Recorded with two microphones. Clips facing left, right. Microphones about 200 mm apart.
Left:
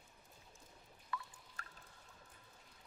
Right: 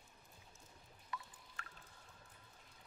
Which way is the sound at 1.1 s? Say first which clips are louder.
Left 3 dB; 20° right (ahead or behind).